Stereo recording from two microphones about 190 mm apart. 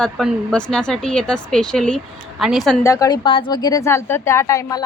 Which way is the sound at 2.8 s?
20° left (ahead or behind).